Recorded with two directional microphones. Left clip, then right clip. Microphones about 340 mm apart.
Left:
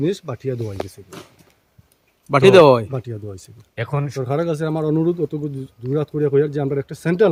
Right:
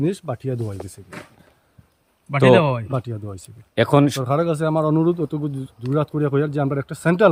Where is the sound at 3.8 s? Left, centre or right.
Right.